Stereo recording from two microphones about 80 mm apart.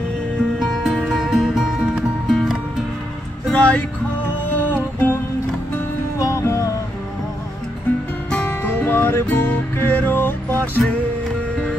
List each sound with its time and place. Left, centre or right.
0.6 s music: centre
3.5 s music: centre
6.1 s music: left
8.3 s music: centre
8.6 s music: left